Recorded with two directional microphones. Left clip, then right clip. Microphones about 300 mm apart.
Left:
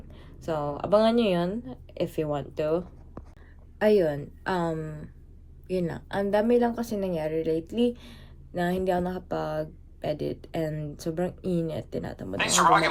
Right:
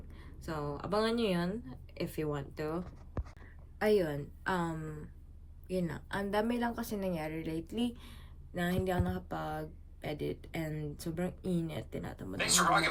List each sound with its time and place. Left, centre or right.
0.1 s a woman's voice: centre
12.4 s speech: left